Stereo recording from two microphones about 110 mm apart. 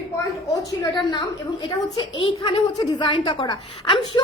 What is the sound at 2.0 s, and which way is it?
Speech, 50° left (ahead or behind).